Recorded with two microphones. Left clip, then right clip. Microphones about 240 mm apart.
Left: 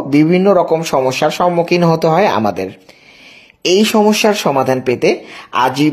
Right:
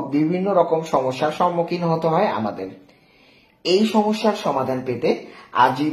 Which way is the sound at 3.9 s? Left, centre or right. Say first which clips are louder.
Left 8 dB; left.